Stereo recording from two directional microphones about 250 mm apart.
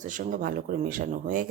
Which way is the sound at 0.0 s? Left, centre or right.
Right.